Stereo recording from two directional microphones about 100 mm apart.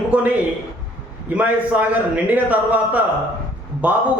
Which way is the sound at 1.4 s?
15° right (ahead or behind).